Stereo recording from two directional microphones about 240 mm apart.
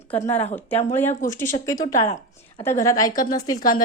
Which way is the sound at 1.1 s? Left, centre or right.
Left.